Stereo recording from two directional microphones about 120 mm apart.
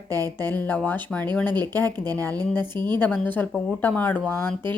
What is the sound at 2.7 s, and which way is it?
Speech, 35° right (ahead or behind).